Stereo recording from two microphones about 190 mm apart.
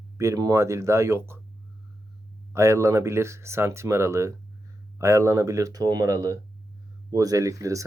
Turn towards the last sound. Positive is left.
turn(degrees=-15)  # may be behind; listen again after turning